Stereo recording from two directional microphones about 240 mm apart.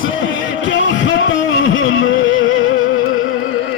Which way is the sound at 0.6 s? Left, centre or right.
Left.